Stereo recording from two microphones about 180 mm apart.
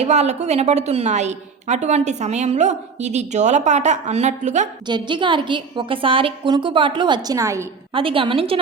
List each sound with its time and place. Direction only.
0.0 s a woman's voice: 35° right (ahead or behind)
4.9 s a woman's voice: 25° right (ahead or behind)
7.9 s a woman's voice: 30° right (ahead or behind)